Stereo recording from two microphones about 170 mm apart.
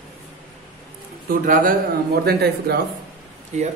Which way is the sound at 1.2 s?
55° right (ahead or behind).